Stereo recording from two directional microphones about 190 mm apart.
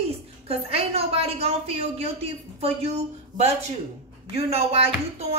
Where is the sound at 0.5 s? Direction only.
30° right (ahead or behind).